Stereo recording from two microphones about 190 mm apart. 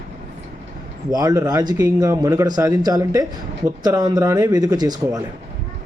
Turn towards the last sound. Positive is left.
turn(degrees=-20)  # may be behind; listen again after turning